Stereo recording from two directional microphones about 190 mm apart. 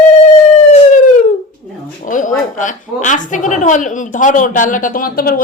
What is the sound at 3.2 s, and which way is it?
A woman's voice, 40° left (ahead or behind).